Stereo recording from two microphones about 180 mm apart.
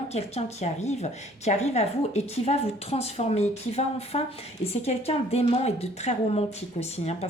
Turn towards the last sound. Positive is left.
turn(degrees=35)  # may be behind; listen again after turning